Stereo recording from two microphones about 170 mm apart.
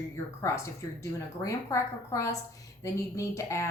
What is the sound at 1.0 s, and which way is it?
Speech, 20° left (ahead or behind).